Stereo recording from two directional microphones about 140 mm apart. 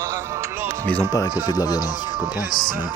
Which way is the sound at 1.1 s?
30° left (ahead or behind).